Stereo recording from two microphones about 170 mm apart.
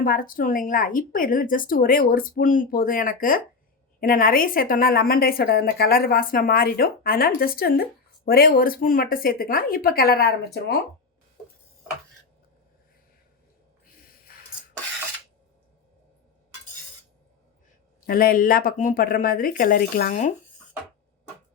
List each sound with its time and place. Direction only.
0.0 s a woman's voice: 55° left (ahead or behind)
14.3 s a sound: 60° left (ahead or behind)
18.0 s a woman's voice: 60° left (ahead or behind)